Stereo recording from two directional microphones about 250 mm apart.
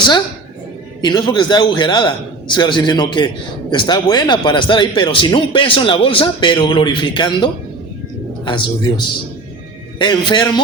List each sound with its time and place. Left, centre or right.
1.0 s a man's voice: centre